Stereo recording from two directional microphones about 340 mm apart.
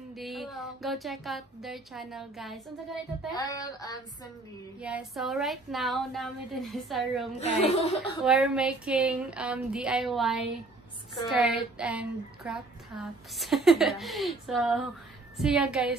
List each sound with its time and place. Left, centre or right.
0.1 s speech: centre
3.3 s a sound: centre
4.7 s speech: centre
7.3 s speech: centre
8.2 s speech: centre